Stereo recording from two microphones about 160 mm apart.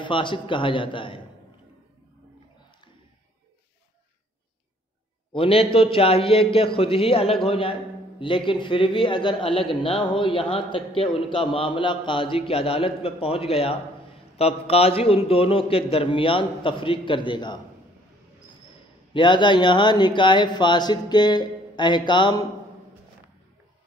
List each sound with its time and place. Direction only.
0.0 s a man's voice: 30° left (ahead or behind)
5.3 s a man's voice: 35° left (ahead or behind)
19.1 s speech: 30° left (ahead or behind)